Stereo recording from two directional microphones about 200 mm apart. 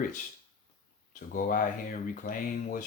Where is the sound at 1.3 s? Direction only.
45° left (ahead or behind).